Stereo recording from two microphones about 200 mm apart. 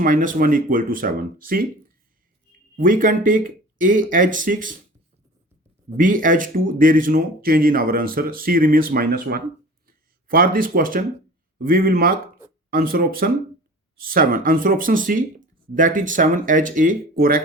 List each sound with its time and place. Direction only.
0.0 s speech: 40° right (ahead or behind)
6.0 s speech: 45° right (ahead or behind)
9.8 s a sound: 45° right (ahead or behind)
11.5 s speech: 45° right (ahead or behind)